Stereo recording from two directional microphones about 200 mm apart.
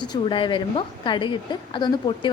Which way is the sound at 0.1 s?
25° left (ahead or behind).